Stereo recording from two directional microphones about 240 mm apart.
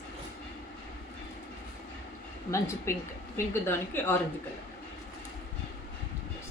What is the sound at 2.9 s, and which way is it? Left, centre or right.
A woman's voice, centre.